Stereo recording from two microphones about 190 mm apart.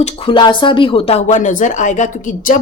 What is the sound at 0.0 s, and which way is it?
Speech, 25° left (ahead or behind).